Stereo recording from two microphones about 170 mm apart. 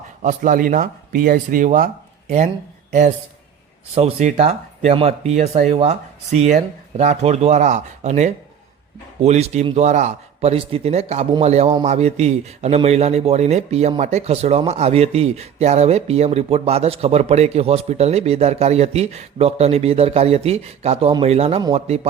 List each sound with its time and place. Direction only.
0.2 s speech: 50° right (ahead or behind)
3.9 s speech: 40° right (ahead or behind)